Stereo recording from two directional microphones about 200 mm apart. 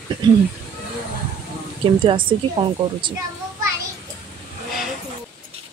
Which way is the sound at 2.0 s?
25° right (ahead or behind).